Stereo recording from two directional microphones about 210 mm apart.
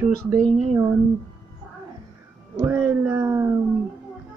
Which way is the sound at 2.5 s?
10° right (ahead or behind).